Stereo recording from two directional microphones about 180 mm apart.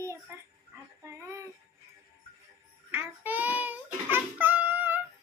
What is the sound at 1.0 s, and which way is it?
Child singing, 15° right (ahead or behind).